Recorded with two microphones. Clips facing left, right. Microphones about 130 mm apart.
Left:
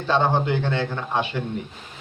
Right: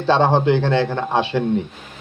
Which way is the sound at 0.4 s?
90° right.